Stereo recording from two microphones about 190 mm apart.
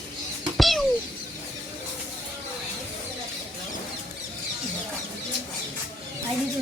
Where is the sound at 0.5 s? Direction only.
Centre (ahead or behind).